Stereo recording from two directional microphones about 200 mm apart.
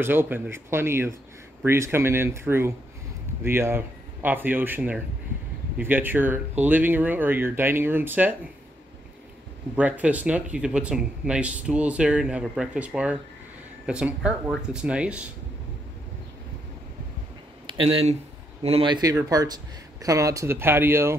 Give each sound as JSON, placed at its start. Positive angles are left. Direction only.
{"t": 0.0, "sound": "speech", "side_deg": -10}
{"t": 9.8, "sound": "speech", "side_deg": -5}
{"t": 17.6, "sound": "speech", "side_deg": -25}